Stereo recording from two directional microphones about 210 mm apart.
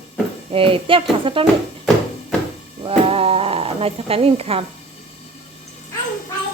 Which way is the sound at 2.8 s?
25° right (ahead or behind).